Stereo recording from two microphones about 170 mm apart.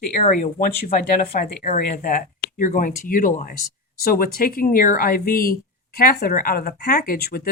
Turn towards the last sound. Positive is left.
turn(degrees=60)  # may be behind; listen again after turning